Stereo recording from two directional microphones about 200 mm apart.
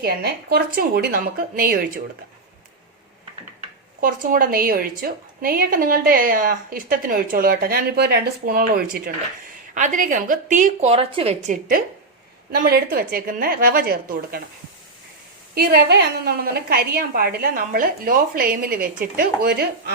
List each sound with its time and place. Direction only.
0.0 s speech: 50° right (ahead or behind)
3.6 s a woman's voice: 45° right (ahead or behind)
12.5 s speech: 50° right (ahead or behind)
15.5 s speech: 55° right (ahead or behind)